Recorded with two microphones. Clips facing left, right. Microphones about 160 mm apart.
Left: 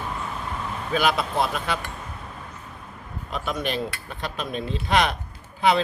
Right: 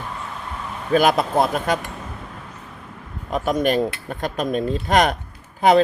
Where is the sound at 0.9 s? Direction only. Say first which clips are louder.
Right 6 dB; 45° right (ahead or behind).